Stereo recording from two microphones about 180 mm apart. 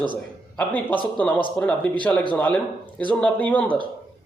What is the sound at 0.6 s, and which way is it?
A man's voice, 10° left (ahead or behind).